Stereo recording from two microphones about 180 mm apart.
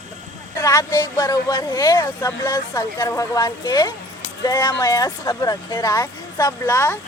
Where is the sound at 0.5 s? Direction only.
15° left (ahead or behind).